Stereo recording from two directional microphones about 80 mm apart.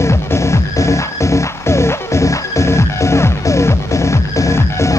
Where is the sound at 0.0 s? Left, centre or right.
Left.